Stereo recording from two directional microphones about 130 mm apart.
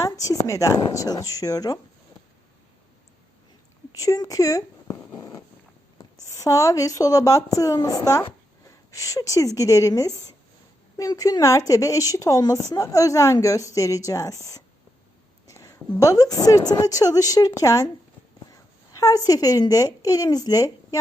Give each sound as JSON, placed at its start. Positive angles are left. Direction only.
{"t": 0.0, "sound": "a woman's voice", "side_deg": 25}
{"t": 3.9, "sound": "a woman's voice", "side_deg": 25}
{"t": 15.4, "sound": "a sound", "side_deg": 25}
{"t": 16.0, "sound": "a woman's voice", "side_deg": 25}
{"t": 18.9, "sound": "a woman's voice", "side_deg": 25}